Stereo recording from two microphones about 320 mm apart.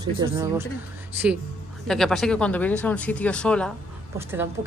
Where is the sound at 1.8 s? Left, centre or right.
Centre.